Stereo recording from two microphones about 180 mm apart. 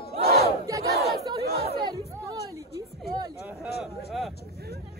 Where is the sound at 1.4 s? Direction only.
60° right (ahead or behind).